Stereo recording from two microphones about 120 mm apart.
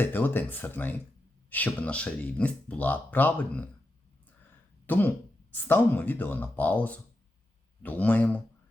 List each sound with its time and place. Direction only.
0.0 s speech: 15° left (ahead or behind)
4.9 s speech: 15° left (ahead or behind)